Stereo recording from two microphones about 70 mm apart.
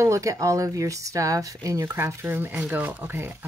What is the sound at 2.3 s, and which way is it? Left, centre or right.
Speech, right.